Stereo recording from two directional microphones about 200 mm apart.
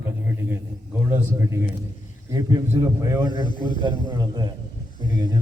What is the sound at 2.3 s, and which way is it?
Speech, 20° right (ahead or behind).